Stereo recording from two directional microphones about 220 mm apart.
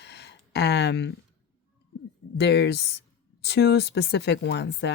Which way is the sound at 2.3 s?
50° left (ahead or behind).